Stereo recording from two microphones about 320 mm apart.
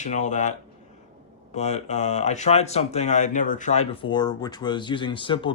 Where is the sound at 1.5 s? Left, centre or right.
Left.